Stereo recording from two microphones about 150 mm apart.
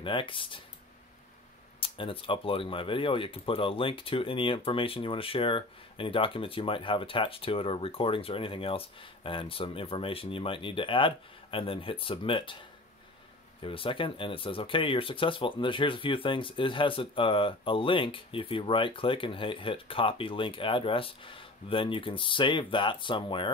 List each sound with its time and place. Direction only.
0.0 s speech: 35° left (ahead or behind)
1.8 s speech: 35° left (ahead or behind)
13.6 s speech: 35° left (ahead or behind)